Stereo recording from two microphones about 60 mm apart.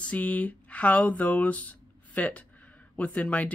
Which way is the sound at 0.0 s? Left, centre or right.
Left.